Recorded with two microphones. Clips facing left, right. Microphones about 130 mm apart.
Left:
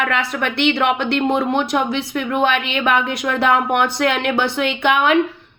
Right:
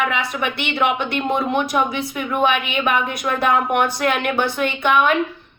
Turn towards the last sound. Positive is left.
turn(degrees=65)  # may be behind; listen again after turning